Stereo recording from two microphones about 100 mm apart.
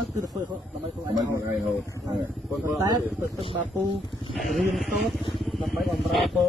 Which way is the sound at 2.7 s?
35° right (ahead or behind).